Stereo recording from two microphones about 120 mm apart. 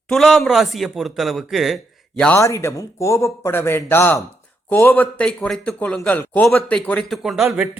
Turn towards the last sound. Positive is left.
turn(degrees=-5)  # may be behind; listen again after turning